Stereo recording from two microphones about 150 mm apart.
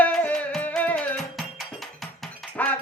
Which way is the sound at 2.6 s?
10° left (ahead or behind).